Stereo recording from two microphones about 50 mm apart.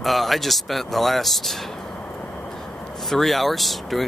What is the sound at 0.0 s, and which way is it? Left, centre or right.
Speech, centre.